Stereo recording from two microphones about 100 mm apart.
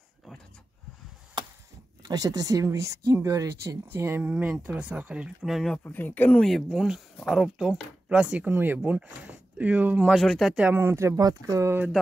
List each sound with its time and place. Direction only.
2.0 s speech: 40° right (ahead or behind); by 5.5 s 10° right (ahead or behind)
5.5 s speech: centre (ahead or behind)
5.9 s speech: 20° left (ahead or behind)
6.7 s speech: 5° right (ahead or behind)
10.1 s speech: centre (ahead or behind)
10.7 s speech: 25° right (ahead or behind)